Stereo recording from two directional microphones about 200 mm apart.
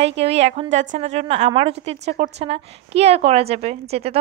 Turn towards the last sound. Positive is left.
turn(degrees=-30)  # may be behind; listen again after turning